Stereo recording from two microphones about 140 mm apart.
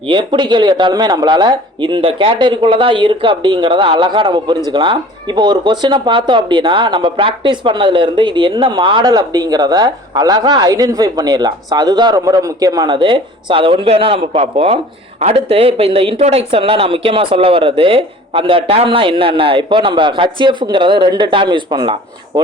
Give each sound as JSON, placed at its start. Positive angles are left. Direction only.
{"t": 0.1, "sound": "speech", "side_deg": -35}